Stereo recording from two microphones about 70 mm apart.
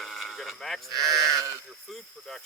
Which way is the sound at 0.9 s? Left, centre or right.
Right.